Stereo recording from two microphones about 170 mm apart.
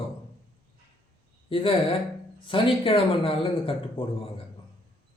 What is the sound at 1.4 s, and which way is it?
Speech, 30° left (ahead or behind).